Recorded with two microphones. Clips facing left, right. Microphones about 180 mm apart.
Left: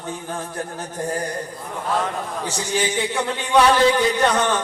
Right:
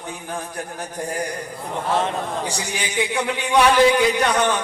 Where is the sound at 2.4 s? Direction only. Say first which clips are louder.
Left 4 dB; 15° right (ahead or behind).